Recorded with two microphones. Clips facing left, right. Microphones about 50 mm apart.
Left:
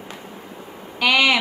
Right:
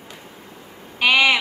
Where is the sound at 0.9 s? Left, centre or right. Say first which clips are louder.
Right 1 dB; right.